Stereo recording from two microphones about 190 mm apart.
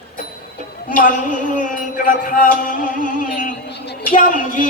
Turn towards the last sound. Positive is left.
turn(degrees=45)  # may be behind; listen again after turning